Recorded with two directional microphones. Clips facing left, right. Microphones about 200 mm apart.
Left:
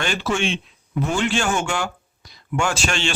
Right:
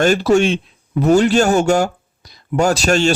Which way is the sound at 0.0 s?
40° right (ahead or behind).